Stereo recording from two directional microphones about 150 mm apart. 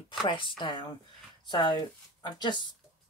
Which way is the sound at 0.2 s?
35° left (ahead or behind).